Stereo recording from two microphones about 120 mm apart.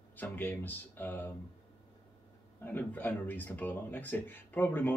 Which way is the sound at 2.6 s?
15° left (ahead or behind).